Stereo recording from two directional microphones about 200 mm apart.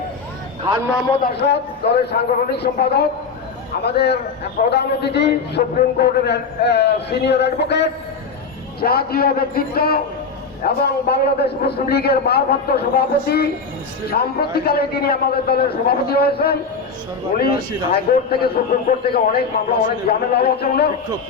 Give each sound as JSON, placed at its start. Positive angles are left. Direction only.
{"t": 1.2, "sound": "a man's voice", "side_deg": 55}
{"t": 17.9, "sound": "a man's voice", "side_deg": 50}